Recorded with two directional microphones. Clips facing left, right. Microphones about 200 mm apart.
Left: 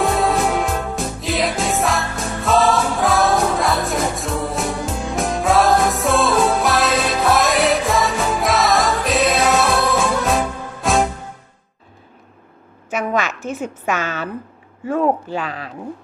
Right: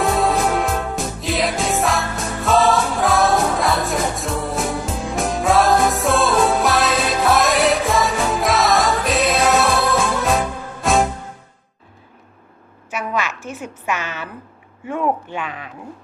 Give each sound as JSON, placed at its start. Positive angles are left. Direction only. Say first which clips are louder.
{"t": 0.0, "sound": "music", "louder": "even", "side_deg": 0}
{"t": 13.5, "sound": "a woman's voice", "louder": "left 3 dB", "side_deg": 45}